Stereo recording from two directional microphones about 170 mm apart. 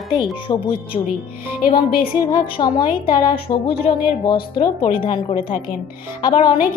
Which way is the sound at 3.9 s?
35° left (ahead or behind).